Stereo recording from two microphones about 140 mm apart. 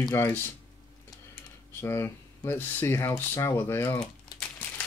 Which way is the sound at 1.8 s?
20° left (ahead or behind).